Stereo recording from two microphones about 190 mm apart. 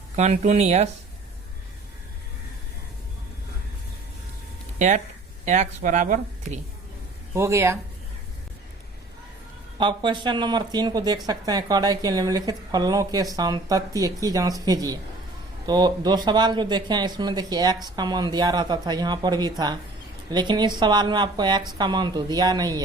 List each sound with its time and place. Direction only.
0.2 s speech: 35° right (ahead or behind)
4.8 s speech: 40° right (ahead or behind)
7.3 s speech: 15° right (ahead or behind)
9.7 s speech: 25° right (ahead or behind)